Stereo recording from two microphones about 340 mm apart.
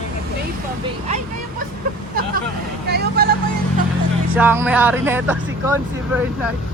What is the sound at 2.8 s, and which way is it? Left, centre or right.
Vehicle, right.